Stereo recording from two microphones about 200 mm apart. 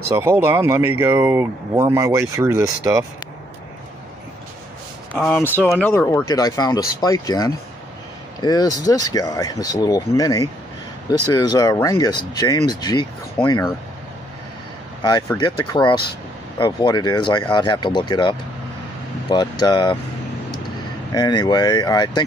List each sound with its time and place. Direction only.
0.1 s speech: 10° right (ahead or behind)
5.5 s speech: 5° left (ahead or behind)
15.0 s speech: 20° left (ahead or behind)
21.1 s speech: 20° left (ahead or behind)